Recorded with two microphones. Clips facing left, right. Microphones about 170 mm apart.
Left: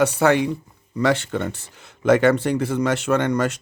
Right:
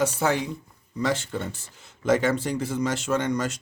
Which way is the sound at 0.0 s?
70° left (ahead or behind).